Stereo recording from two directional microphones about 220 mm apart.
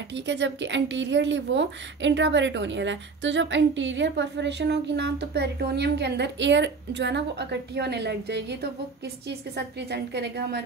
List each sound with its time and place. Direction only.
0.1 s speech: 55° right (ahead or behind)
9.6 s speech: 50° right (ahead or behind)